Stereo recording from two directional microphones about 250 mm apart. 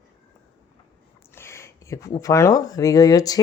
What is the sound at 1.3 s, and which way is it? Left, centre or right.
Speech, centre.